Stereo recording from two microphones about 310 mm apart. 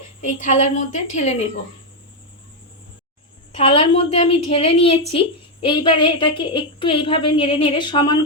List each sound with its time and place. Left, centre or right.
0.2 s a woman's voice: left
3.5 s a woman's voice: centre